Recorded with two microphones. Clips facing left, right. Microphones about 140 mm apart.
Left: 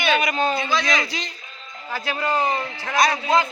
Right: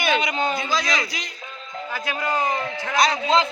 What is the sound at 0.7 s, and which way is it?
Speech, 35° right (ahead or behind).